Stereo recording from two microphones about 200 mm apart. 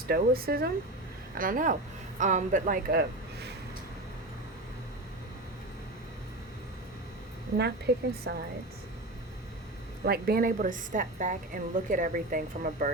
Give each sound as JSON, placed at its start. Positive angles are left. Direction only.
{"t": 0.1, "sound": "a woman's voice", "side_deg": -50}
{"t": 7.9, "sound": "a woman's voice", "side_deg": -55}
{"t": 10.1, "sound": "a woman's voice", "side_deg": -50}